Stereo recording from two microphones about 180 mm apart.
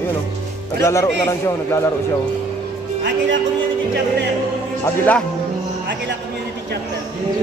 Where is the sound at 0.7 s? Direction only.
15° left (ahead or behind).